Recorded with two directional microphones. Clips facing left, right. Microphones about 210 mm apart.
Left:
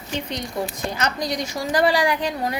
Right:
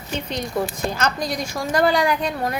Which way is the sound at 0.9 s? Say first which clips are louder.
Left 2 dB; 20° left (ahead or behind).